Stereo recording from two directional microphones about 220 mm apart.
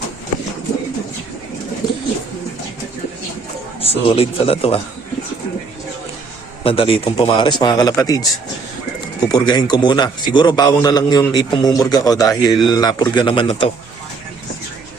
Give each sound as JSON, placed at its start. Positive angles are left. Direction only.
{"t": 3.8, "sound": "a man's voice", "side_deg": 25}
{"t": 6.7, "sound": "a man's voice", "side_deg": 25}